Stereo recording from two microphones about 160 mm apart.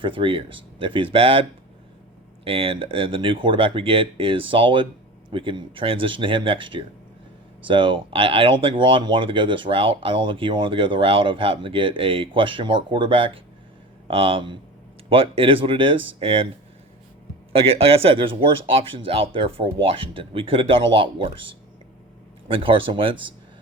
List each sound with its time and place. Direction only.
0.0 s speech: 30° right (ahead or behind)
17.5 s speech: 35° right (ahead or behind)
22.4 s speech: 35° right (ahead or behind)